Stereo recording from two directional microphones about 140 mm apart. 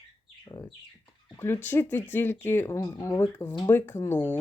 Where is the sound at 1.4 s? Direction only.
15° left (ahead or behind).